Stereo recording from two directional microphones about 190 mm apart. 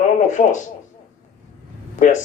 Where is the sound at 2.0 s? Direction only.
40° left (ahead or behind).